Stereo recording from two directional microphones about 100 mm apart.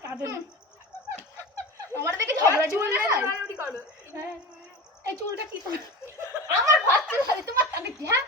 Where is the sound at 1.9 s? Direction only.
30° right (ahead or behind).